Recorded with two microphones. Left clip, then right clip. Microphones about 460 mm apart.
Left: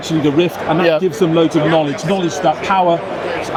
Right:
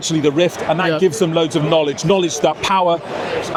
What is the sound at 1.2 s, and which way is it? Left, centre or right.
Speech, right.